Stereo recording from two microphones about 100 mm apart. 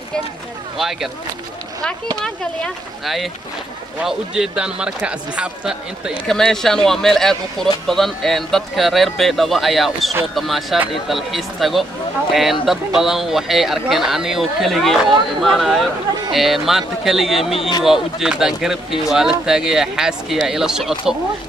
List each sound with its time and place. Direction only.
0.7 s speech: 5° right (ahead or behind)
2.1 s a man's voice: 5° left (ahead or behind); by 6.1 s 10° right (ahead or behind)
6.2 s speech: 5° left (ahead or behind)
17.6 s speech: 50° left (ahead or behind)
17.8 s speech: 5° right (ahead or behind)